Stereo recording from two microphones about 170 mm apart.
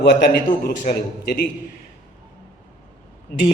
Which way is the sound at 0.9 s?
45° left (ahead or behind).